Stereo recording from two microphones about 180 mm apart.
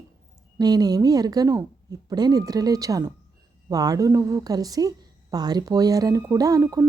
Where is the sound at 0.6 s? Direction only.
20° right (ahead or behind).